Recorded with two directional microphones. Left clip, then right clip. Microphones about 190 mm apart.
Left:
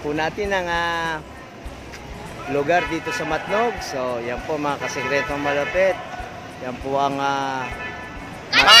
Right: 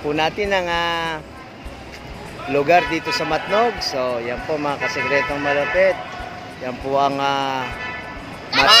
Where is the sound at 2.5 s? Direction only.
10° right (ahead or behind).